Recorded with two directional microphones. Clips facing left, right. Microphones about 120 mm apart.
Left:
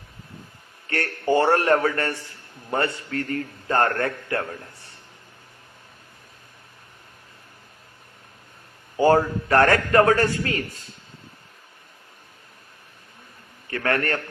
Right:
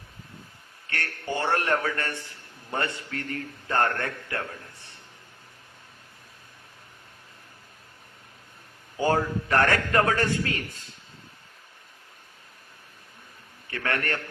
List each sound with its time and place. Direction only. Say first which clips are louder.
0.9 s a man's voice: left 9 dB; 40° left (ahead or behind)
9.0 s a man's voice: left 6 dB; 40° left (ahead or behind)
13.7 s a man's voice: left 5 dB; 40° left (ahead or behind)